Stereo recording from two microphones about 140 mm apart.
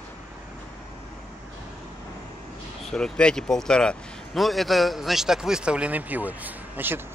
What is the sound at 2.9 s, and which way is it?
Speech, 5° left (ahead or behind).